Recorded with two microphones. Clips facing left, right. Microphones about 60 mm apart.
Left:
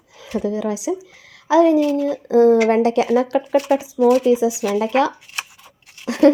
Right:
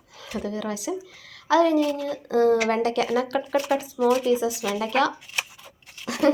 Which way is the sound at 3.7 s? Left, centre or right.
Centre.